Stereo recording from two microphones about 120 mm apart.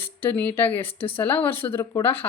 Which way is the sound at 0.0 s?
15° left (ahead or behind).